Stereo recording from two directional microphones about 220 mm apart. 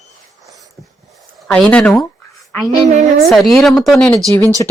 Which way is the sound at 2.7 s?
30° right (ahead or behind).